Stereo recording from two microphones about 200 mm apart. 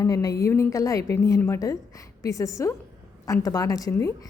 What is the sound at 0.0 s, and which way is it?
A woman's voice, 15° left (ahead or behind).